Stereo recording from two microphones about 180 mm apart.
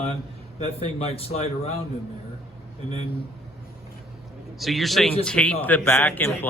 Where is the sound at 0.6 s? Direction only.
35° left (ahead or behind).